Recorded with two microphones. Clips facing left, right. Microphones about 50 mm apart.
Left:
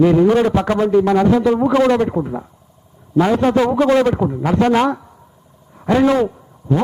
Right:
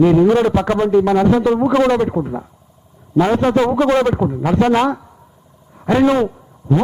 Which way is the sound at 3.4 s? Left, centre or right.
Centre.